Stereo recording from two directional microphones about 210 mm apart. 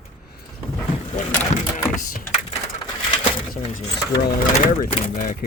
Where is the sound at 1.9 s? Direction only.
40° left (ahead or behind).